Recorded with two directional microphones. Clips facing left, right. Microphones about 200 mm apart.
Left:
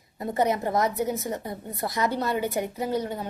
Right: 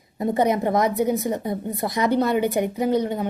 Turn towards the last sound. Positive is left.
turn(degrees=-20)  # may be behind; listen again after turning